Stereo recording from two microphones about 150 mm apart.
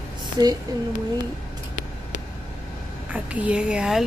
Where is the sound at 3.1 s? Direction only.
10° right (ahead or behind).